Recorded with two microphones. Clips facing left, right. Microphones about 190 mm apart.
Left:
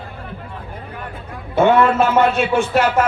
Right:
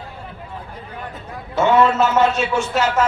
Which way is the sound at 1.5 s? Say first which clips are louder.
Left 2 dB; 55° left (ahead or behind).